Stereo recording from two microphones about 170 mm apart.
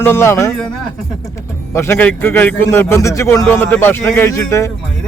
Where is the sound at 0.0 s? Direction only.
15° left (ahead or behind).